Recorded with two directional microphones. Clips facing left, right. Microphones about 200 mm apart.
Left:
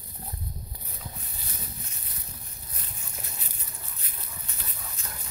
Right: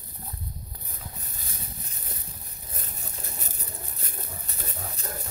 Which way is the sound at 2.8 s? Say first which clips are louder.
Right 2 dB; 45° right (ahead or behind).